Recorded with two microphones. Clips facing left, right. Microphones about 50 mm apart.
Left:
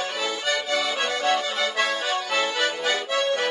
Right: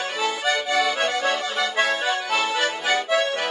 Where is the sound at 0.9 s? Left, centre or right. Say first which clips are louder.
Right 1 dB; centre.